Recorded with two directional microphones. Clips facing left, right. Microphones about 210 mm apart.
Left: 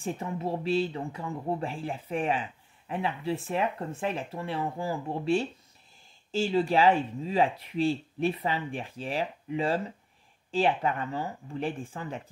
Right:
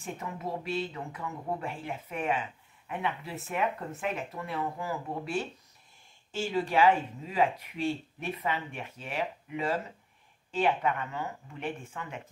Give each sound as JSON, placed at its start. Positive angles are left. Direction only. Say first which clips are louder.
{"t": 0.0, "sound": "speech", "louder": "left 5 dB", "side_deg": 30}